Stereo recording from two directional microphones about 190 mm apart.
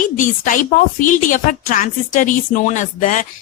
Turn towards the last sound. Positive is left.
turn(degrees=45)  # may be behind; listen again after turning